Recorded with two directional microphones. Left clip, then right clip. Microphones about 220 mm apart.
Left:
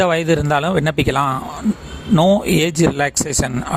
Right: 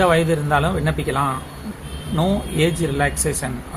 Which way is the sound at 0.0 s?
45° left (ahead or behind).